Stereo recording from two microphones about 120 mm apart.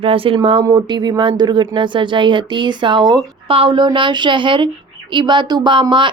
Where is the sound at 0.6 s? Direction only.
35° right (ahead or behind).